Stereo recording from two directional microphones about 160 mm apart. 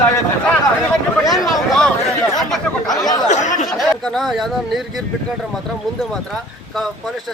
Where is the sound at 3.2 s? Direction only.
50° left (ahead or behind).